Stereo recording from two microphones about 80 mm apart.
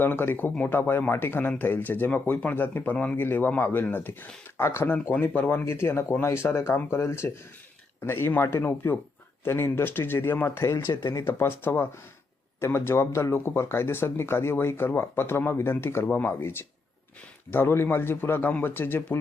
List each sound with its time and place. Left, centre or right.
0.0 s speech: left